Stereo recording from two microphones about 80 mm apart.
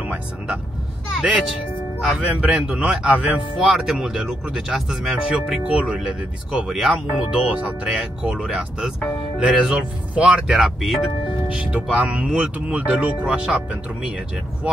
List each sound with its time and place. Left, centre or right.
0.0 s speech: centre
2.0 s speech: centre
2.4 s speech: centre
10.6 s speech: centre
11.5 s speech: centre